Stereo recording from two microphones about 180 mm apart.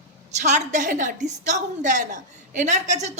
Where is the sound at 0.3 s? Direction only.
40° right (ahead or behind).